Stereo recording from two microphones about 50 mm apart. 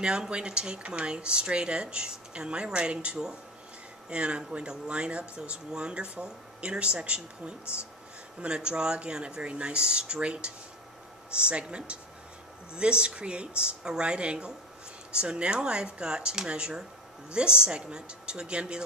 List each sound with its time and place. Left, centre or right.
0.0 s speech: centre